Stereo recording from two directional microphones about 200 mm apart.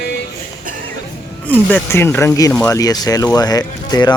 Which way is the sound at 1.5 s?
10° left (ahead or behind).